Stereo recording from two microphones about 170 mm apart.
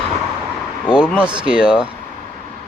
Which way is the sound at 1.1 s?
5° right (ahead or behind).